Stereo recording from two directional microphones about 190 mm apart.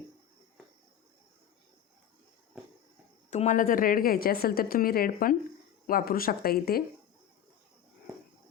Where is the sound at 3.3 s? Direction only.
40° left (ahead or behind).